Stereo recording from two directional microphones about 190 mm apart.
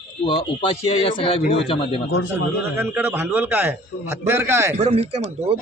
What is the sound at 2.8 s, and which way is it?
A man's voice, 10° right (ahead or behind).